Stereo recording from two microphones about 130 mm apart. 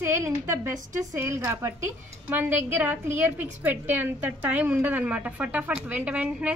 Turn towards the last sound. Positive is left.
turn(degrees=-10)  # may be behind; listen again after turning